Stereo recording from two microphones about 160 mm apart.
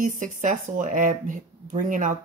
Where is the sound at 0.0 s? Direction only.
50° right (ahead or behind).